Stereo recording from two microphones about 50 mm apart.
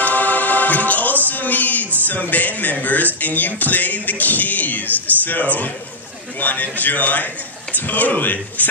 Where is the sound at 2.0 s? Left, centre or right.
Left.